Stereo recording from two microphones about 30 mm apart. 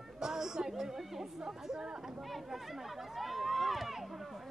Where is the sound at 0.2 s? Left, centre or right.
Centre.